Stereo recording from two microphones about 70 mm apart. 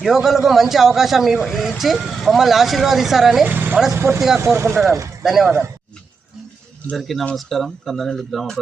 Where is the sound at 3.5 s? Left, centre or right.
Right.